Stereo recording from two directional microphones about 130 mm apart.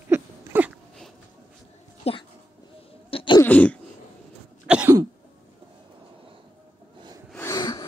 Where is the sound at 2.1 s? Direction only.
50° left (ahead or behind).